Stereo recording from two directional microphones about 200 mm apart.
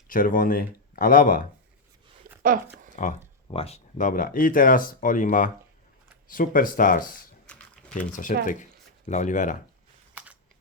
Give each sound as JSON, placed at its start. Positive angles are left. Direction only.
{"t": 0.1, "sound": "speech", "side_deg": 45}
{"t": 2.3, "sound": "a sound", "side_deg": -45}
{"t": 2.9, "sound": "speech", "side_deg": 40}